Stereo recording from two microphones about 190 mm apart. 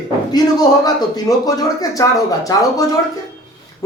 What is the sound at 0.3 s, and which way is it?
A woman's voice, 20° left (ahead or behind).